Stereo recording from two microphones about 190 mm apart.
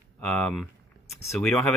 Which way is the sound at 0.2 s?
5° left (ahead or behind).